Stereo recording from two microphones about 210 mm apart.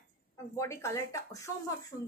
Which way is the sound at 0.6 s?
15° left (ahead or behind).